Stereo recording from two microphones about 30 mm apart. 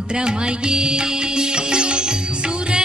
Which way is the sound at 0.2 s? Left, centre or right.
Right.